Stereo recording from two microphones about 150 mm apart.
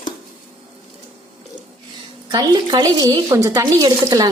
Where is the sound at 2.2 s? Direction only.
25° right (ahead or behind).